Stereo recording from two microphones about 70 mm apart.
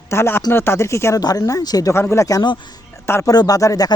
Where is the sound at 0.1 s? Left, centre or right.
Left.